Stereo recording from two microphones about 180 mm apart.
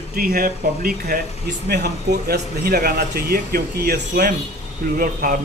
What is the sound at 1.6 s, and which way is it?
Speech, 65° right (ahead or behind).